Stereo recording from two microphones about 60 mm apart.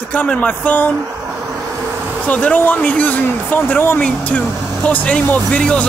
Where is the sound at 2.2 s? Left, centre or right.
Left.